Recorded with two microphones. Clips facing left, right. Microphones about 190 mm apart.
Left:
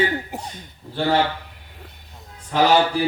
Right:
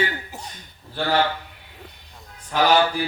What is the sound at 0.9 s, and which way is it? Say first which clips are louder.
Speech: left 3 dB; 25° left (ahead or behind).